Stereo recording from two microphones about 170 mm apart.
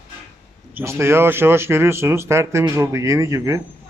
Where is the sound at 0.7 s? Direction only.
15° right (ahead or behind).